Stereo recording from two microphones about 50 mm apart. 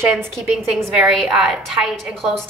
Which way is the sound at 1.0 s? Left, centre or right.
Centre.